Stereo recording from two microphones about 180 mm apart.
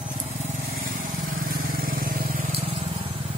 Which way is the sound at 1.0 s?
50° right (ahead or behind).